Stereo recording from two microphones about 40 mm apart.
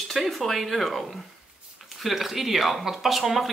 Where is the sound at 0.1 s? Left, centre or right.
Centre.